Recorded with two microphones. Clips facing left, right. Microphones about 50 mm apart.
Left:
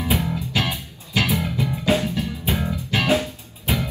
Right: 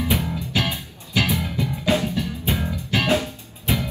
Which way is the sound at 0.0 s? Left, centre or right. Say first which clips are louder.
Left 1 dB; left.